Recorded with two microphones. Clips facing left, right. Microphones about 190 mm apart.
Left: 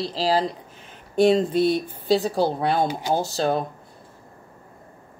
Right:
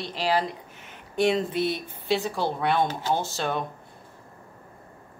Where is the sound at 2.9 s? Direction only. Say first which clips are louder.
Left 3 dB; 15° left (ahead or behind).